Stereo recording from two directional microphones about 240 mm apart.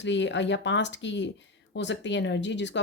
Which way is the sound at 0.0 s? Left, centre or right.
Left.